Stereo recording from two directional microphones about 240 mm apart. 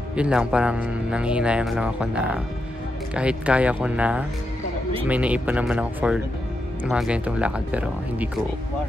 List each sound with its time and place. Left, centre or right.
0.1 s a man's voice: centre